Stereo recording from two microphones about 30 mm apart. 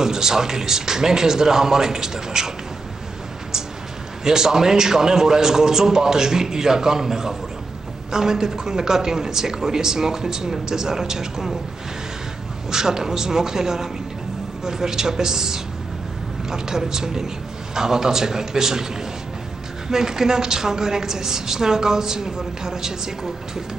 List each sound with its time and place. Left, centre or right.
0.0 s speech: centre
4.2 s a woman's voice: centre
12.7 s a woman's voice: centre
19.9 s a woman's voice: centre